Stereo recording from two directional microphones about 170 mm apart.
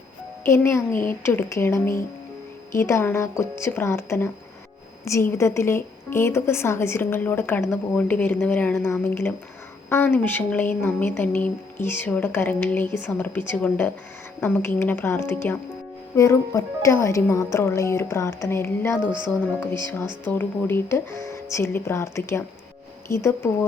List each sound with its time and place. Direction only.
0.4 s a woman's voice: 15° left (ahead or behind)
20.2 s a woman's voice: 10° left (ahead or behind)